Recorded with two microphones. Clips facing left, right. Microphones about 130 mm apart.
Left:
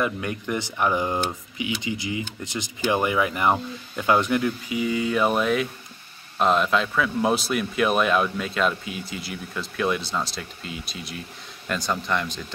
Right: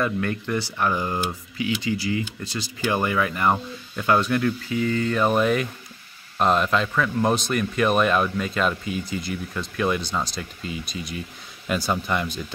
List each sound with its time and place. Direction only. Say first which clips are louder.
0.0 s a man's voice: right 2 dB; 15° left (ahead or behind); by 12.4 s 5° right (ahead or behind)